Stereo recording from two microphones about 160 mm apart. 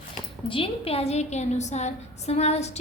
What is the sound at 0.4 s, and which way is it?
A woman's voice, 35° left (ahead or behind).